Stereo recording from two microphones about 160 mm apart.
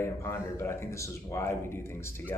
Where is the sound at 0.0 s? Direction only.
15° left (ahead or behind).